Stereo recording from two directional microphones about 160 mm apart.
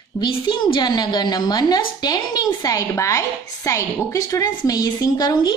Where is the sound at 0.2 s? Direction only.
30° left (ahead or behind).